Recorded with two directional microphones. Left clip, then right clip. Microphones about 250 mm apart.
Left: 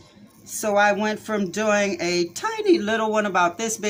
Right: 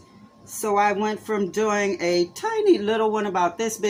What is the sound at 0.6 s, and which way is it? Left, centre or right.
Speech, left.